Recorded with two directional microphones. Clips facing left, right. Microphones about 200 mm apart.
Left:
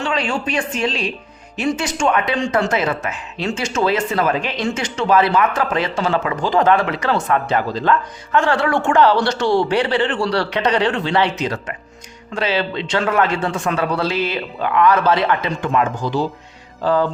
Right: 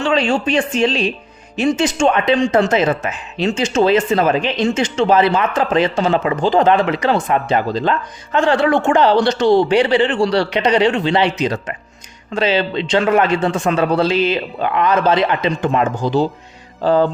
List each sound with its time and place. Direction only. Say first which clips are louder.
0.0 s speech: right 5 dB; 25° right (ahead or behind)
12.3 s speech: right 4 dB; 20° right (ahead or behind)